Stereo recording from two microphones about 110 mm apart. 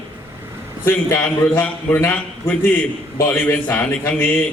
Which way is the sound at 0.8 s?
25° left (ahead or behind).